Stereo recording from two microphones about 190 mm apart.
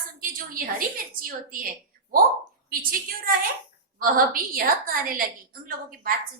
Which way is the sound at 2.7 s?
50° right (ahead or behind).